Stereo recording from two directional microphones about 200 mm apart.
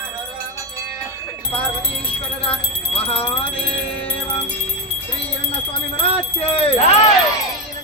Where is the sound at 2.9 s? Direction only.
30° left (ahead or behind).